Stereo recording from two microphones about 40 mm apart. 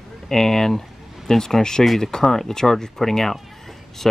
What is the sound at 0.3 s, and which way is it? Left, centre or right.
Speech, centre.